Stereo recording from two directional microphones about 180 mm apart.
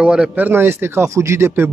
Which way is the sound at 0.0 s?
5° right (ahead or behind).